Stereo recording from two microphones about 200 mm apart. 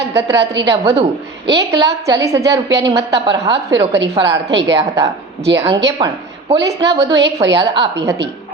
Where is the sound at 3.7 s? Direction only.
65° right (ahead or behind).